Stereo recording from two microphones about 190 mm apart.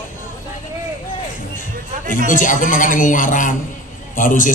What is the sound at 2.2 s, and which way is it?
A man's voice, 45° left (ahead or behind).